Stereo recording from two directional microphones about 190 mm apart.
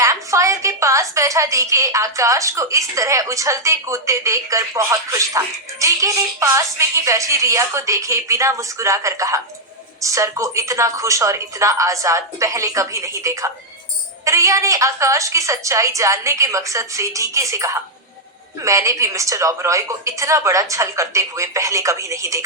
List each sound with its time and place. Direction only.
0.0 s a woman's voice: 15° right (ahead or behind)